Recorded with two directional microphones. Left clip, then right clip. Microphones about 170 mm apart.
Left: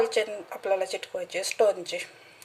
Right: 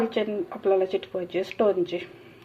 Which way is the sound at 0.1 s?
15° left (ahead or behind).